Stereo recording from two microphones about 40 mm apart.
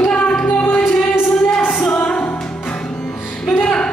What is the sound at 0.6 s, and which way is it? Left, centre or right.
Music, left.